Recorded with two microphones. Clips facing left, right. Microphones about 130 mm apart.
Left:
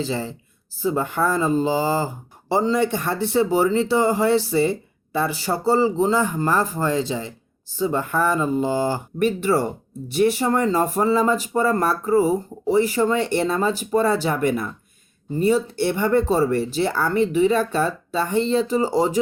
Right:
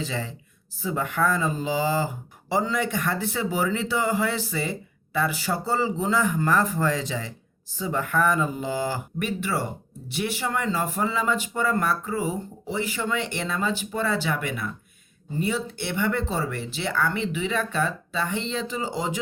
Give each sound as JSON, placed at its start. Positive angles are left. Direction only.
{"t": 0.0, "sound": "speech", "side_deg": 35}